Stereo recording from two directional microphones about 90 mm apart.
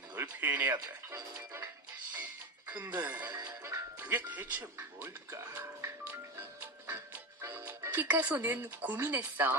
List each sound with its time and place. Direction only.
0.2 s speech: 25° right (ahead or behind)
1.1 s music: 30° right (ahead or behind)
2.6 s speech: 20° right (ahead or behind)
3.6 s music: 30° right (ahead or behind)
4.0 s speech: 20° right (ahead or behind)
6.8 s music: 30° right (ahead or behind)
7.7 s speech: 25° right (ahead or behind)